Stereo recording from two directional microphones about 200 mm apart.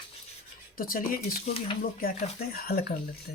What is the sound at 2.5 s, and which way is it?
Speech, 50° left (ahead or behind).